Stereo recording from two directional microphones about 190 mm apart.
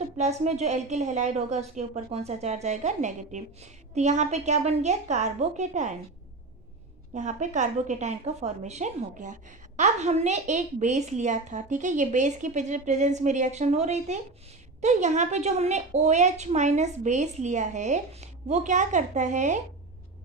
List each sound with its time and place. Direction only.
0.2 s a woman's voice: 35° right (ahead or behind)
7.2 s a woman's voice: 40° right (ahead or behind)